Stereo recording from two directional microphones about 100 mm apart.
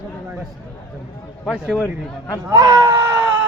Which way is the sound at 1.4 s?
Centre (ahead or behind).